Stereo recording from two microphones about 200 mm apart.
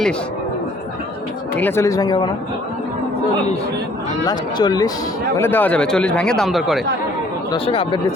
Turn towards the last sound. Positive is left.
turn(degrees=25)  # may be behind; listen again after turning